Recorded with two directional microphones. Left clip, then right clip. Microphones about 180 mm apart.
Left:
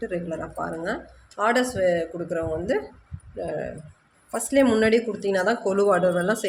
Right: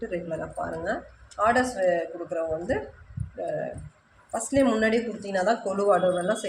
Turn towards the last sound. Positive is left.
turn(degrees=55)  # may be behind; listen again after turning